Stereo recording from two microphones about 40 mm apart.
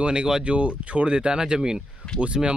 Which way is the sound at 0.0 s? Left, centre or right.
Right.